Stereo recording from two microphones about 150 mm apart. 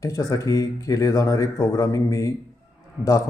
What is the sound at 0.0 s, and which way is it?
Speech, 25° left (ahead or behind).